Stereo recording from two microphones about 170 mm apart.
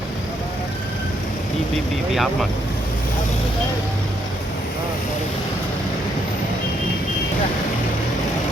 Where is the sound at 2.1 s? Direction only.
Centre (ahead or behind).